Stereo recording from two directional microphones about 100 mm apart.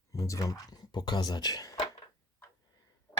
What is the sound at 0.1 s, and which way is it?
Speech, 35° left (ahead or behind).